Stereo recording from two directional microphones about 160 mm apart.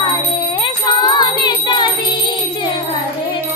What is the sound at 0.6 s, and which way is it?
Music, 30° left (ahead or behind).